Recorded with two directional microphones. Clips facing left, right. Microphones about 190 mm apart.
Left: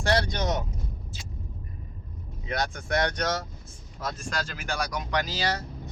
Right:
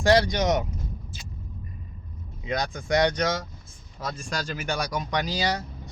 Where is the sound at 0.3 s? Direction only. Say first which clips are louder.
Right 5 dB; 90° right.